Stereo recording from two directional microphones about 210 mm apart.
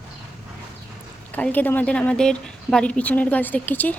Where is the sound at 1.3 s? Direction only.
5° left (ahead or behind).